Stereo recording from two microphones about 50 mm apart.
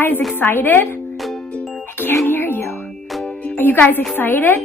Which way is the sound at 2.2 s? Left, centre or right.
Left.